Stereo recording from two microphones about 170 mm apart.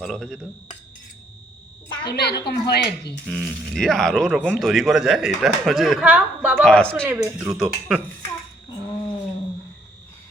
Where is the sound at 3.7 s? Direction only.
5° left (ahead or behind).